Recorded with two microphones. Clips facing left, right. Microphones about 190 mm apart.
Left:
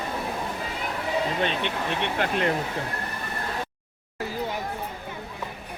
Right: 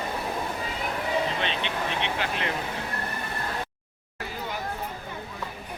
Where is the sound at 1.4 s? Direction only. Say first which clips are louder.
Left 3 dB; 50° left (ahead or behind).